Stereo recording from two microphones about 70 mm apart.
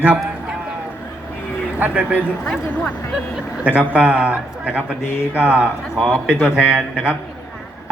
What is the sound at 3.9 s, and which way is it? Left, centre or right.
A man's voice, centre.